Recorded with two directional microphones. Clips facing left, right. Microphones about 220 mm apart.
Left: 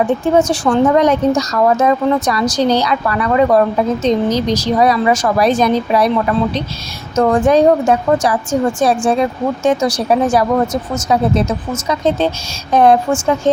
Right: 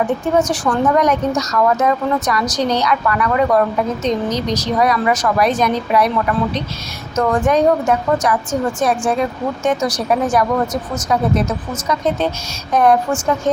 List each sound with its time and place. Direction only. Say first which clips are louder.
0.3 s a woman's voice: left 4 dB; 30° left (ahead or behind)